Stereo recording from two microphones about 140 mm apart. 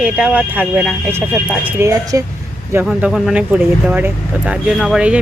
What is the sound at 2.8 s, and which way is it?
Speech, 5° right (ahead or behind).